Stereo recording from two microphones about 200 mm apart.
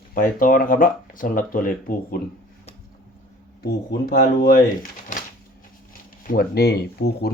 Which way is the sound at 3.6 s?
50° left (ahead or behind).